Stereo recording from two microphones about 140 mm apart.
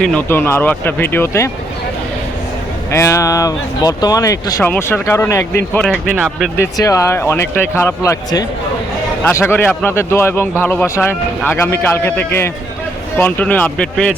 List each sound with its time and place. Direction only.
0.0 s speech: 5° left (ahead or behind)
0.3 s a man's voice: 15° left (ahead or behind)
2.9 s a man's voice: 20° left (ahead or behind)
6.1 s speech: 5° right (ahead or behind)
6.6 s a man's voice: 25° left (ahead or behind); by 14.2 s 10° left (ahead or behind)